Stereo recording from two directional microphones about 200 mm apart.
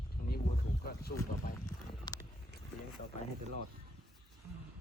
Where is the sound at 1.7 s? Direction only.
15° left (ahead or behind).